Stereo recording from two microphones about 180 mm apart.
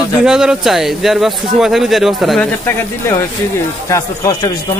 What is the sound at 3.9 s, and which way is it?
Speech, 20° left (ahead or behind).